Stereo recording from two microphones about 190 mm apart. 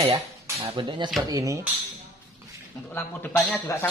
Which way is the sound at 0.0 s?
15° right (ahead or behind).